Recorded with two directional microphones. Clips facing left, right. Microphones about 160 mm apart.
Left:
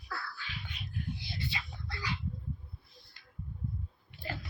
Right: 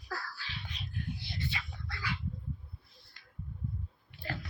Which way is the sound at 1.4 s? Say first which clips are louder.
Even; 25° left (ahead or behind).